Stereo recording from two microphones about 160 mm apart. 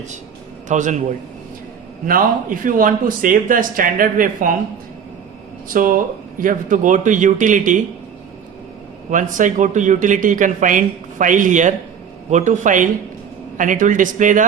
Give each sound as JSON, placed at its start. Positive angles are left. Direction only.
{"t": 0.7, "sound": "speech", "side_deg": -50}
{"t": 2.0, "sound": "speech", "side_deg": -60}
{"t": 5.6, "sound": "speech", "side_deg": -60}
{"t": 9.0, "sound": "speech", "side_deg": -55}